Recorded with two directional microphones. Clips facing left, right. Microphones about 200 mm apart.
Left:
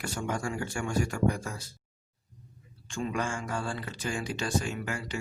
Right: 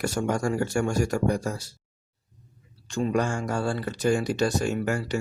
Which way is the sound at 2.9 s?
40° right (ahead or behind).